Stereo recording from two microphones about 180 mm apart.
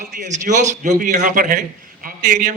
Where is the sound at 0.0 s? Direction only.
45° right (ahead or behind).